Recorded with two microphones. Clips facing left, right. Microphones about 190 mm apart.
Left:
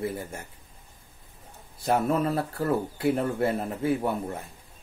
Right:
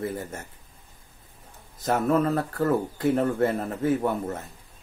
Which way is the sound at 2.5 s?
10° left (ahead or behind).